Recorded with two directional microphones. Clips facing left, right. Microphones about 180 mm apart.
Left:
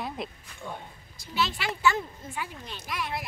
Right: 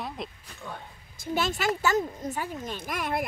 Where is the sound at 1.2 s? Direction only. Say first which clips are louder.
Right 3 dB; 45° right (ahead or behind).